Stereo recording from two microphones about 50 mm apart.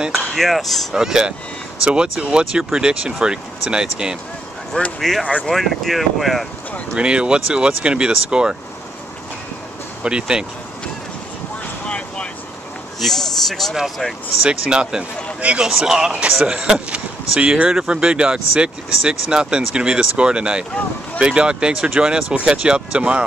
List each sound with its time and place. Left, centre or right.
0.3 s speech: centre
0.9 s speech: centre
4.7 s speech: left
5.5 s speech: centre
7.0 s speech: centre
10.0 s speech: centre
11.8 s vehicle: left
13.0 s speech: centre
14.4 s speech: centre